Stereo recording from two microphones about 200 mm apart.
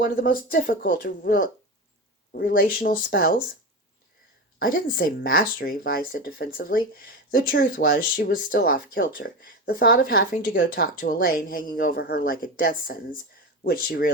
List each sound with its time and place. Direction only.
0.0 s speech: 45° left (ahead or behind)
4.6 s speech: 45° left (ahead or behind)